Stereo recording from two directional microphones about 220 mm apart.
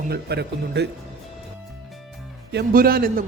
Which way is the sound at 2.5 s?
45° right (ahead or behind).